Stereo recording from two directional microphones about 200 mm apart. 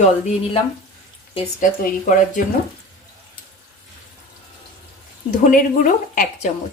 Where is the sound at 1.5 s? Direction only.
40° left (ahead or behind).